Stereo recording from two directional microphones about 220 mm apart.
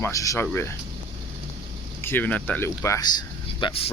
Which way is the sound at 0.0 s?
15° left (ahead or behind).